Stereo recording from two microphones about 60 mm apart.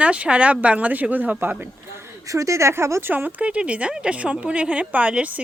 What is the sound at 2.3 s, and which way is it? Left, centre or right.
Speech, right.